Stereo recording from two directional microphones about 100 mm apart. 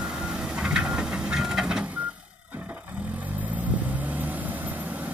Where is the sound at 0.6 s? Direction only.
5° right (ahead or behind).